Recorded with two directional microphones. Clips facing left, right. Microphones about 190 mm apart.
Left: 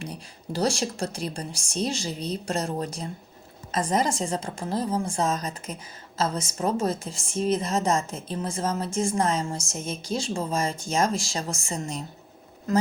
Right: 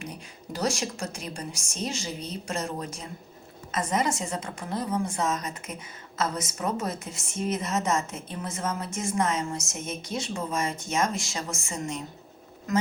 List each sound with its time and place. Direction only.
0.0 s a woman's voice: 35° left (ahead or behind)